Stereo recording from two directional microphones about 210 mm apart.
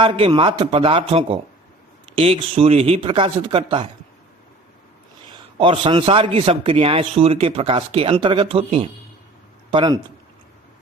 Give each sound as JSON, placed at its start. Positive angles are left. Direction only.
{"t": 0.0, "sound": "a man's voice", "side_deg": -25}
{"t": 5.3, "sound": "a man's voice", "side_deg": -25}